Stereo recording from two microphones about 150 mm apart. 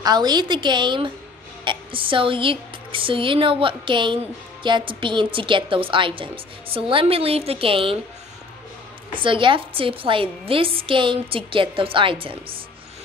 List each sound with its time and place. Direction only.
0.0 s a woman's voice: 25° right (ahead or behind)
9.1 s a woman's voice: 35° right (ahead or behind)